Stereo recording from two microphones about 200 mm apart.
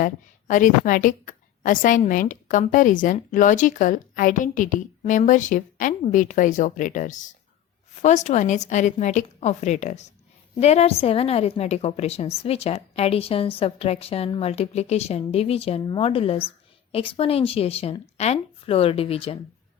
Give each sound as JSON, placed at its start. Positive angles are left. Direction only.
{"t": 0.0, "sound": "a woman's voice", "side_deg": 40}